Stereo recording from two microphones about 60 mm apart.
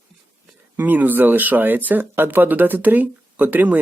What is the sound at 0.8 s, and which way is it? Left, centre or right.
Speech, right.